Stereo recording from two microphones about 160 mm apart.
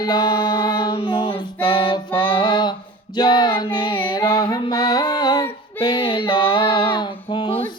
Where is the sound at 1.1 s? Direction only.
35° left (ahead or behind).